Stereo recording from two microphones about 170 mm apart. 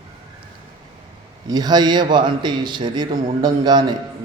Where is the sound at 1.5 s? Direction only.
25° right (ahead or behind).